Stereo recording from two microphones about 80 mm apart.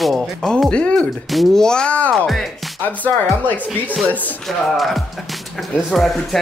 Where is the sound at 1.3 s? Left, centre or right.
Centre.